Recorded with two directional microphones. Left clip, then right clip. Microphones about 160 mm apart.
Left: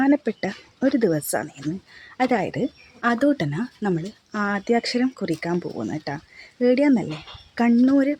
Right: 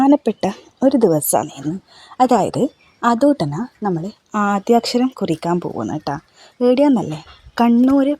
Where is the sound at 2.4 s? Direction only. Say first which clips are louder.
Right 8 dB; 45° right (ahead or behind).